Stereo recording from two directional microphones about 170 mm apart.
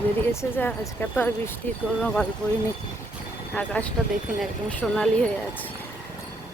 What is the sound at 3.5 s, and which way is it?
Speech, 10° left (ahead or behind).